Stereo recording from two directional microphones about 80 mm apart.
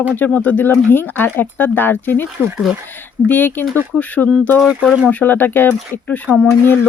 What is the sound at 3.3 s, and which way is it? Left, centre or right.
Speech, left.